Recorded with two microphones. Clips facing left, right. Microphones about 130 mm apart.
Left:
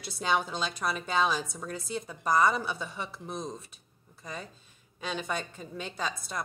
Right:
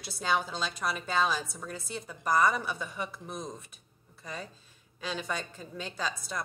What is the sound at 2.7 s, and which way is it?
Speech, 25° left (ahead or behind).